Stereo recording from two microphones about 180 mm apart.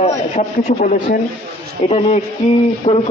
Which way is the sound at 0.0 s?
35° left (ahead or behind).